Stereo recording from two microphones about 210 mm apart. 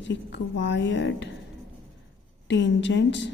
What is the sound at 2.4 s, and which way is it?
Speech, 60° left (ahead or behind).